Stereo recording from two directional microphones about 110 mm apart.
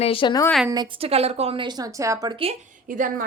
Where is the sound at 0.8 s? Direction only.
55° right (ahead or behind).